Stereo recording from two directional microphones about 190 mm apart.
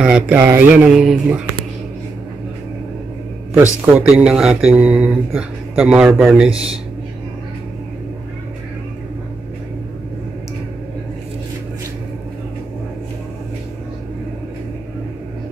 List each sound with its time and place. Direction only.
0.0 s speech: 5° right (ahead or behind)
3.8 s speech: 5° right (ahead or behind)